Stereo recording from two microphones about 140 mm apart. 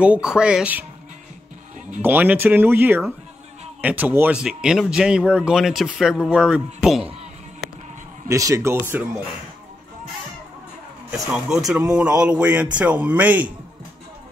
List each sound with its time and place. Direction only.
0.0 s speech: 5° right (ahead or behind)
2.0 s speech: 15° right (ahead or behind)
8.3 s a man's voice: 20° right (ahead or behind)
11.1 s speech: 5° right (ahead or behind)